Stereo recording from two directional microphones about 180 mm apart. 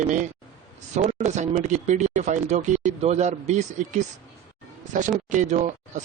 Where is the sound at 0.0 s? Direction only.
45° right (ahead or behind).